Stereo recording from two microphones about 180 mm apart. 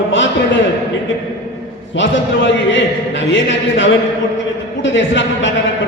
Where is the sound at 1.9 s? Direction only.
90° left.